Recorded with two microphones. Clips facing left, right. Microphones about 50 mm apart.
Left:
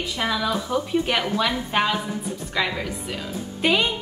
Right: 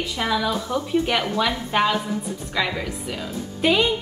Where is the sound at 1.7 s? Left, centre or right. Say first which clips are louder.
Right 2 dB; centre.